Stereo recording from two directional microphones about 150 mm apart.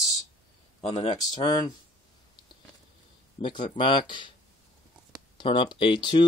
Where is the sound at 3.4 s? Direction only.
35° left (ahead or behind).